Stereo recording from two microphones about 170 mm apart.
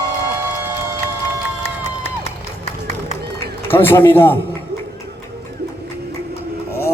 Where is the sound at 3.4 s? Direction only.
15° left (ahead or behind).